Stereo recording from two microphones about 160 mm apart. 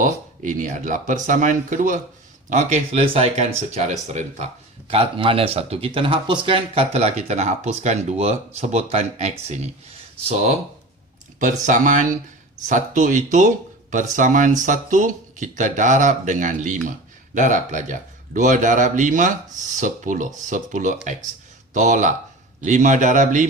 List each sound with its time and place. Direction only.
0.0 s speech: 55° right (ahead or behind)
4.9 s speech: 35° right (ahead or behind)
11.3 s speech: 50° right (ahead or behind)